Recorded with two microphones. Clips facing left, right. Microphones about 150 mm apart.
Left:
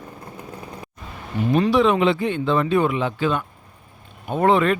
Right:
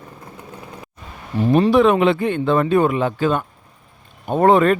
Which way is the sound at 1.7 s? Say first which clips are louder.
Right 2 dB; 50° right (ahead or behind).